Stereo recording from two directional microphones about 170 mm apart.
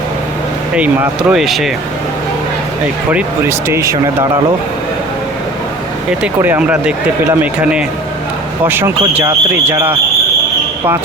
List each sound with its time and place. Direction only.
1.3 s speech: centre (ahead or behind)
3.7 s speech: 15° right (ahead or behind)
6.2 s speech: 10° right (ahead or behind)
8.6 s speech: 10° right (ahead or behind)